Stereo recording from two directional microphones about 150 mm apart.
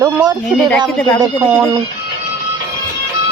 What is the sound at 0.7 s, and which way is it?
Speech, 5° left (ahead or behind).